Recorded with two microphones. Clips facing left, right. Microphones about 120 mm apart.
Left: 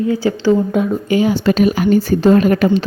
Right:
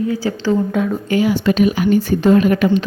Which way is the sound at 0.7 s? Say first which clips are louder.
Left 2 dB; 15° left (ahead or behind).